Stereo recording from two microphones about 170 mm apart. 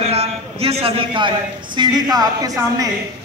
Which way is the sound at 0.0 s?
35° right (ahead or behind).